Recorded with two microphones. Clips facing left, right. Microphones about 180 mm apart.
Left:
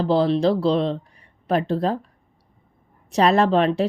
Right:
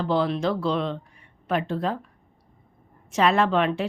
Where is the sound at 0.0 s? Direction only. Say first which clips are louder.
Left 5 dB; 35° left (ahead or behind).